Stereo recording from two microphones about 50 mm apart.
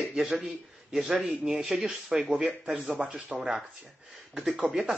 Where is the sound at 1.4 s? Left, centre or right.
Centre.